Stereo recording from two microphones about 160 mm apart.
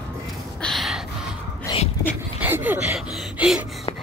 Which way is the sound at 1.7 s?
25° left (ahead or behind).